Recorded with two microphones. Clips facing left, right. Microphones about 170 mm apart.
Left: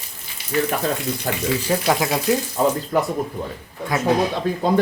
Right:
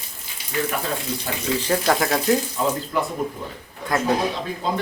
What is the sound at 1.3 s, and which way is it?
Speech, 50° left (ahead or behind).